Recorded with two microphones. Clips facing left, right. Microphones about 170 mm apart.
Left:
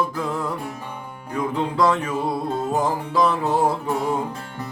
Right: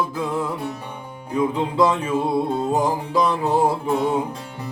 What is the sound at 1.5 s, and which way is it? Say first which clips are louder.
Music: left 2 dB; 10° right (ahead or behind).